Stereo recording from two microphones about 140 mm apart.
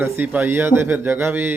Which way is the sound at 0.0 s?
15° right (ahead or behind).